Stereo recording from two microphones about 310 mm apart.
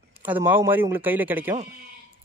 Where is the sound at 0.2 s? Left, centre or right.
Centre.